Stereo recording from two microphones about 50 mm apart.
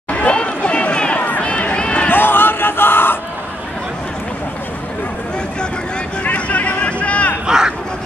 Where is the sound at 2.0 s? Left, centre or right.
Left.